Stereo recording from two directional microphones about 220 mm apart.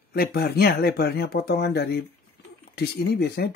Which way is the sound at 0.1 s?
45° left (ahead or behind).